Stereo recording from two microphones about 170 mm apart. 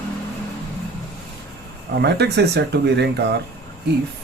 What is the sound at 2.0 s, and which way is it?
Speech, 80° right.